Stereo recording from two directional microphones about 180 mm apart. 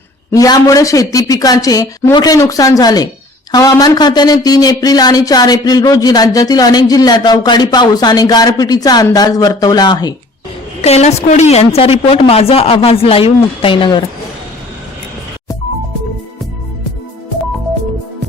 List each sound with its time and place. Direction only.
0.3 s speech: 20° left (ahead or behind)
10.8 s a woman's voice: 35° left (ahead or behind)